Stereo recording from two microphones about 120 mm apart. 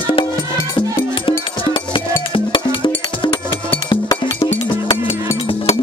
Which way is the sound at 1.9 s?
45° left (ahead or behind).